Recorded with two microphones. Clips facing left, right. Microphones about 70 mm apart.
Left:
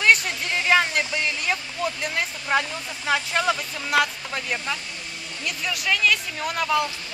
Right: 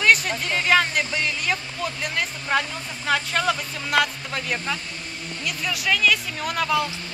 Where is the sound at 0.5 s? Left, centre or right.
Centre.